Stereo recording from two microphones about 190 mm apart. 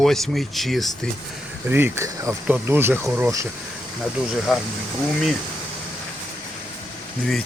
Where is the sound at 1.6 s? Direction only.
10° right (ahead or behind).